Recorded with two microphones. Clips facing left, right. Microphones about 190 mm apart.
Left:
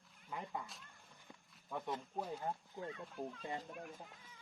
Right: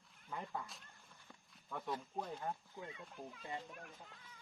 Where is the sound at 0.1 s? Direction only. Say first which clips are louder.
Even; 10° left (ahead or behind).